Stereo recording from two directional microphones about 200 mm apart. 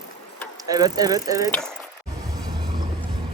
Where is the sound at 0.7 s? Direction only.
20° right (ahead or behind).